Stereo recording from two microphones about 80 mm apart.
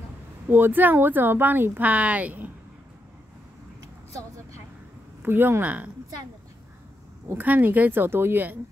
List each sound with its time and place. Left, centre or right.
0.5 s speech: right
5.2 s speech: right
7.2 s speech: right